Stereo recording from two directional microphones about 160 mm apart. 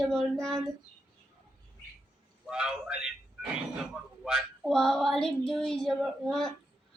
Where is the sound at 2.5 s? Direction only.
5° right (ahead or behind).